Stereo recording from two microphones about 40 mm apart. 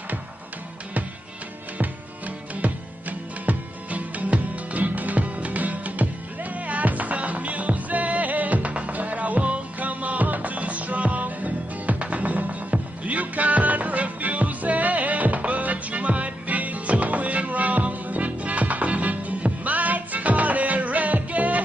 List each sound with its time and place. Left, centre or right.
1.8 s music: right